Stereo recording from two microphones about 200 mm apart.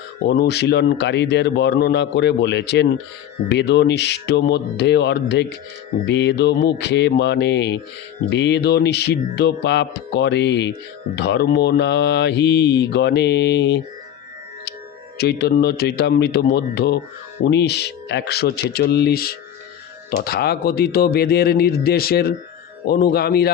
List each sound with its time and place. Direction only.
0.3 s speech: 55° left (ahead or behind)
15.2 s speech: 55° left (ahead or behind)